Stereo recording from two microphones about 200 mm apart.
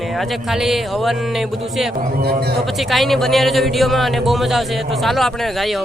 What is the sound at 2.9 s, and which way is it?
Speech, centre (ahead or behind).